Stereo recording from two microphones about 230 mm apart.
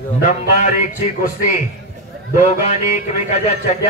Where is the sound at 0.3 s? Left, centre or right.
Left.